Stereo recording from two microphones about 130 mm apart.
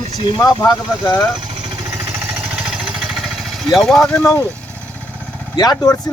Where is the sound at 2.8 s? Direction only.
5° right (ahead or behind).